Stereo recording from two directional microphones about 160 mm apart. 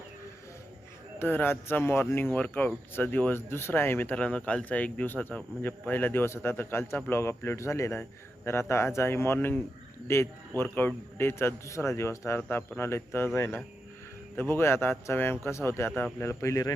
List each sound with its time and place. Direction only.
1.2 s speech: 10° left (ahead or behind)